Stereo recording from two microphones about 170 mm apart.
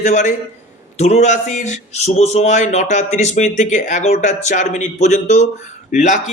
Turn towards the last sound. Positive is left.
turn(degrees=45)  # may be behind; listen again after turning